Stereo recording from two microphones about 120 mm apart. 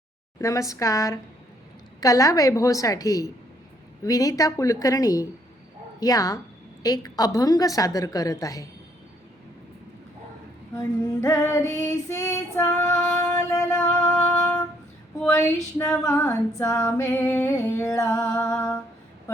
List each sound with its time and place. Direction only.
0.3 s humming: 25° left (ahead or behind)
6.8 s a woman's voice: 30° left (ahead or behind)
7.3 s humming: 30° left (ahead or behind)
10.8 s female singing: 30° left (ahead or behind)
15.8 s humming: 25° left (ahead or behind)